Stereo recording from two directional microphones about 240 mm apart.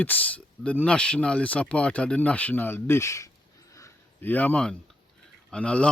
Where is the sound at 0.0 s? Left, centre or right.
Centre.